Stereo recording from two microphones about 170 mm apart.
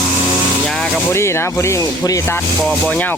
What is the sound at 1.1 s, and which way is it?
Speech, 15° left (ahead or behind).